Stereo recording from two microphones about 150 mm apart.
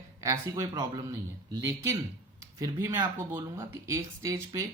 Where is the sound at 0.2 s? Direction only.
20° right (ahead or behind).